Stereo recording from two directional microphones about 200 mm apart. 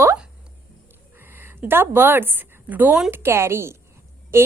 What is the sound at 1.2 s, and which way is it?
A woman's voice, 10° right (ahead or behind).